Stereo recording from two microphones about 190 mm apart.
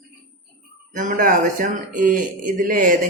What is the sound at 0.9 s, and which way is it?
Speech, 45° right (ahead or behind).